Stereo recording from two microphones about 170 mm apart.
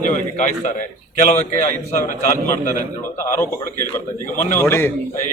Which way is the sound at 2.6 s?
45° left (ahead or behind).